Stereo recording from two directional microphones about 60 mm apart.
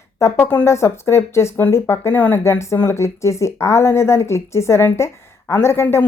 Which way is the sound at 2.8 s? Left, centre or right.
Left.